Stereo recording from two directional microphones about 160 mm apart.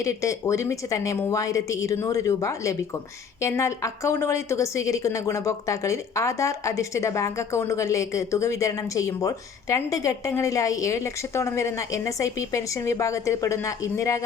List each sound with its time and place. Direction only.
0.0 s a woman's voice: 20° left (ahead or behind)